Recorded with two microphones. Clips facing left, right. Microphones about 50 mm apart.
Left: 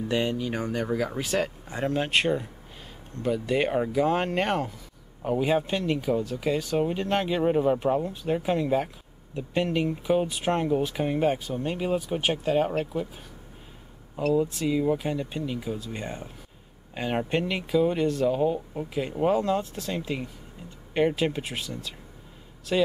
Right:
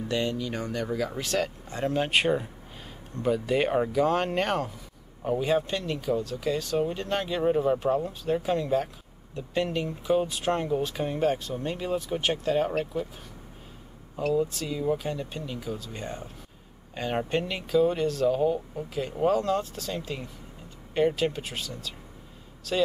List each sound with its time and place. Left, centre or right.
0.1 s speech: centre
1.9 s speech: centre
14.6 s speech: centre